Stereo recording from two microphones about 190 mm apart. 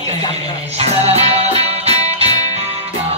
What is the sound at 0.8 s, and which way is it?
Music, 35° right (ahead or behind).